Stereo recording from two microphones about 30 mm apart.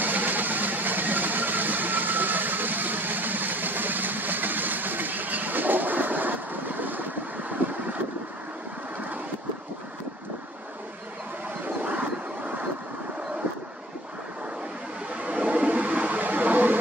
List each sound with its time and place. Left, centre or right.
0.0 s vehicle: right
11.9 s vehicle: right
15.2 s a sound: right